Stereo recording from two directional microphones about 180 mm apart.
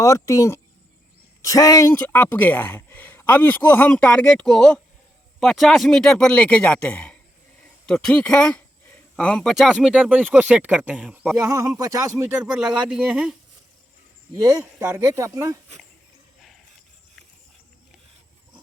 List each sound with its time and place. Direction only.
0.0 s speech: 15° left (ahead or behind); by 12.1 s 20° right (ahead or behind)
12.2 s speech: 5° right (ahead or behind)
14.8 s speech: 15° right (ahead or behind)